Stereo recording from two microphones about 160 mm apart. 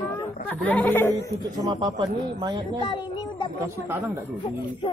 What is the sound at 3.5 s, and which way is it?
Speech, 15° right (ahead or behind).